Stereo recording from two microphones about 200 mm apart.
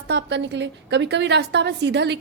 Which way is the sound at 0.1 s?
60° right (ahead or behind).